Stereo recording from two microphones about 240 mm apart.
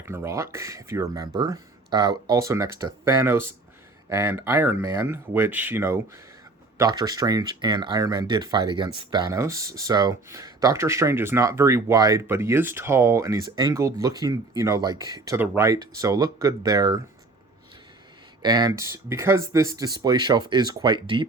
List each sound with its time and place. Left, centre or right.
0.0 s speech: centre
18.4 s speech: centre